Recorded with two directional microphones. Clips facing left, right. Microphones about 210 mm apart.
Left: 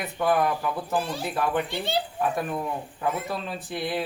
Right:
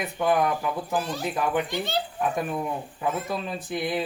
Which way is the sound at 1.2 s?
10° right (ahead or behind).